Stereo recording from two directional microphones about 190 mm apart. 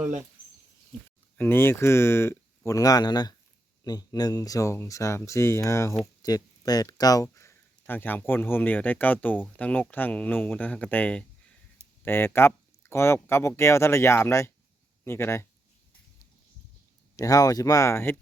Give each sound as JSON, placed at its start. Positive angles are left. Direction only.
{"t": 0.0, "sound": "speech", "side_deg": -40}
{"t": 1.4, "sound": "speech", "side_deg": 10}
{"t": 17.2, "sound": "speech", "side_deg": 20}